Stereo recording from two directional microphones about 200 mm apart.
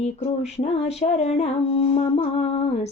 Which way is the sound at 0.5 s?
30° left (ahead or behind).